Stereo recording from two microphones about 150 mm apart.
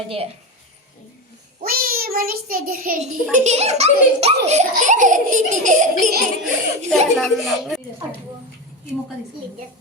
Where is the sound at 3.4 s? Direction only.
50° right (ahead or behind).